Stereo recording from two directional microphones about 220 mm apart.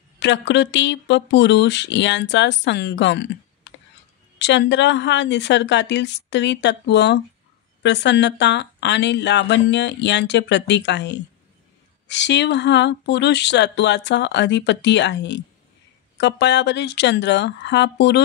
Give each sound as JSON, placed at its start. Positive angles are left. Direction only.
{"t": 0.2, "sound": "speech", "side_deg": 55}